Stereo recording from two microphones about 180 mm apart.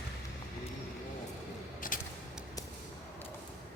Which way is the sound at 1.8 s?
50° left (ahead or behind).